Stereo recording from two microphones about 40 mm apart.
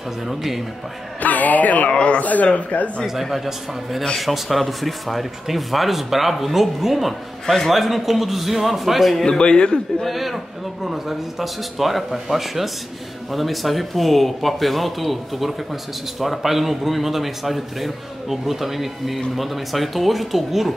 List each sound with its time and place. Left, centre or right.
0.3 s a man's voice: centre
1.2 s a man's voice: left
1.9 s speech: left
3.1 s a man's voice: centre
9.2 s a man's voice: left
10.0 s a man's voice: centre